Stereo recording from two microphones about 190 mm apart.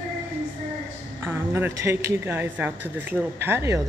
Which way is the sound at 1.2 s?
10° right (ahead or behind).